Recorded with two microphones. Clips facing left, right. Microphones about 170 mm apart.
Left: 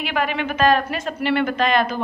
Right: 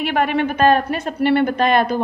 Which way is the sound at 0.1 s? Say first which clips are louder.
Right 4 dB; 50° right (ahead or behind).